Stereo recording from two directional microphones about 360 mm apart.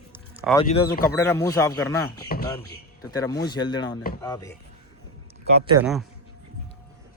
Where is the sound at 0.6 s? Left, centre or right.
Left.